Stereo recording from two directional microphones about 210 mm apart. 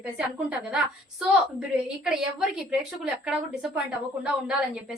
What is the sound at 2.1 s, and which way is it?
A woman's voice, 5° right (ahead or behind).